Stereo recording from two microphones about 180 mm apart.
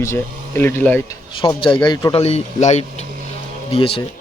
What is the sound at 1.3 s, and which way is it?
A man's voice, 25° left (ahead or behind).